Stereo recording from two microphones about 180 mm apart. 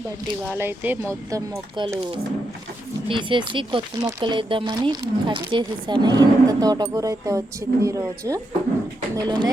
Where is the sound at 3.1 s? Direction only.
25° right (ahead or behind).